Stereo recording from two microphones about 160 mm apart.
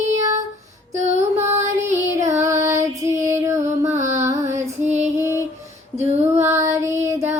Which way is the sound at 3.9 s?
45° right (ahead or behind).